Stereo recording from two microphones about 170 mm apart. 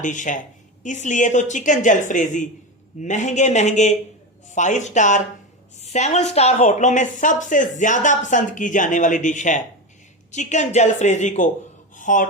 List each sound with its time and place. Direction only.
0.0 s a woman's voice: 50° left (ahead or behind)